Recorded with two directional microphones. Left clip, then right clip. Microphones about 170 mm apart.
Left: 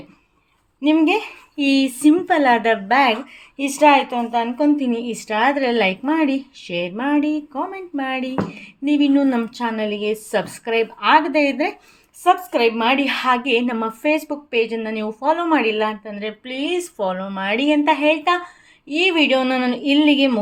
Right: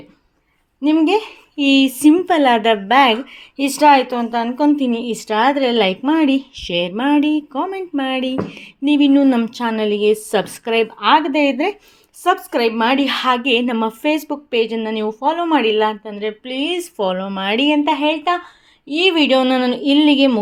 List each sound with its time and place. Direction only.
0.8 s a woman's voice: 30° right (ahead or behind)